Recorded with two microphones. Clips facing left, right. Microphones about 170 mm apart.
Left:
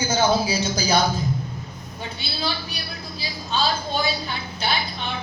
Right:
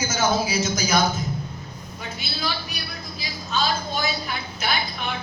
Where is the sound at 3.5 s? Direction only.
30° left (ahead or behind).